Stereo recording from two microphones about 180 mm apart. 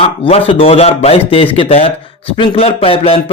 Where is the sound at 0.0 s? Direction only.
35° left (ahead or behind).